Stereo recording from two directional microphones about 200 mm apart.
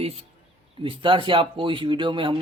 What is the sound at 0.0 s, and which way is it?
Speech, 30° right (ahead or behind).